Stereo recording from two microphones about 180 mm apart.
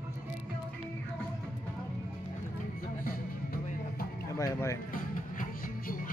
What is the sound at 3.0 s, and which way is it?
Music, 55° left (ahead or behind).